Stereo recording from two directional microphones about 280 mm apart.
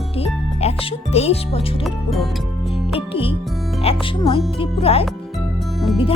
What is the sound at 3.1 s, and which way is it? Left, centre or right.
Speech, centre.